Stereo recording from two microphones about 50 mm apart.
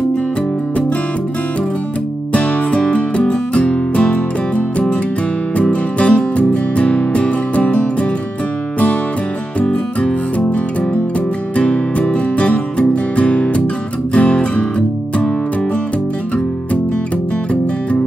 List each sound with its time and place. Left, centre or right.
2.3 s music: left
9.6 s music: left